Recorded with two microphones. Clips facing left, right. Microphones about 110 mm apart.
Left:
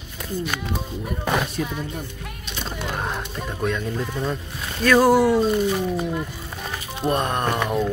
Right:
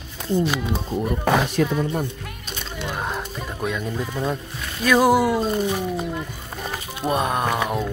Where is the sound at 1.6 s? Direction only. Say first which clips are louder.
Right 6 dB; 75° right (ahead or behind).